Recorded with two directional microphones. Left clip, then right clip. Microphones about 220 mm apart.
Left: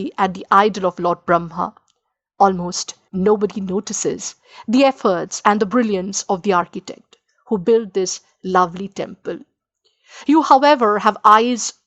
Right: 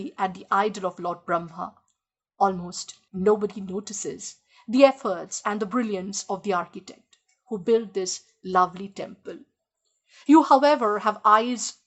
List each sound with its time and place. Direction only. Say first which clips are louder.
0.0 s speech: left 8 dB; 35° left (ahead or behind)